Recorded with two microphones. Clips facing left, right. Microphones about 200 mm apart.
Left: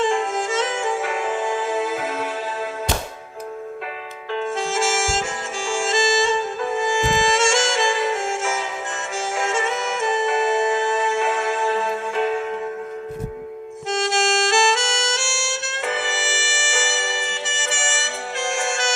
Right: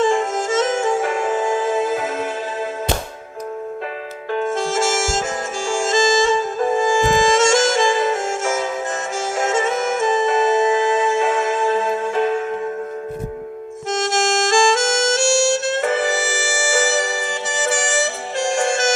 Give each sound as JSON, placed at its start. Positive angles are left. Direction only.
{"t": 0.1, "sound": "music", "side_deg": -45}
{"t": 4.3, "sound": "harmonica", "side_deg": -50}
{"t": 5.6, "sound": "music", "side_deg": -45}
{"t": 13.9, "sound": "music", "side_deg": -45}